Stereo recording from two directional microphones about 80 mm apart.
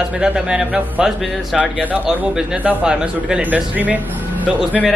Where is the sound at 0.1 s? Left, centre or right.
Centre.